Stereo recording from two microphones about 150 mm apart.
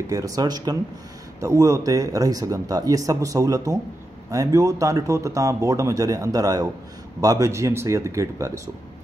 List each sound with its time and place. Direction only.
0.1 s speech: 25° right (ahead or behind)